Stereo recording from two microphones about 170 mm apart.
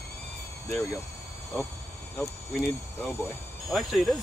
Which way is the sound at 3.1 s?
15° left (ahead or behind).